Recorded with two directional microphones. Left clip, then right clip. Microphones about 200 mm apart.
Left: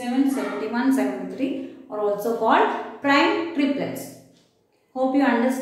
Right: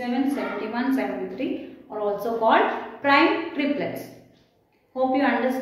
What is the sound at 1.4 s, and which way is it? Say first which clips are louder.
A woman's voice: left 2 dB; 20° left (ahead or behind).